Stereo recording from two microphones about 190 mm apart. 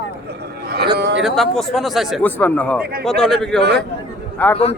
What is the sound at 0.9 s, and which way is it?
Speech, 65° right (ahead or behind).